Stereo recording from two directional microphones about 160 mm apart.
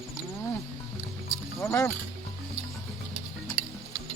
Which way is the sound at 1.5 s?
15° left (ahead or behind).